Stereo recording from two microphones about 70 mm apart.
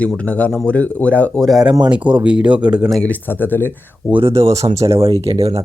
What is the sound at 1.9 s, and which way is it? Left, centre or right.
Speech, centre.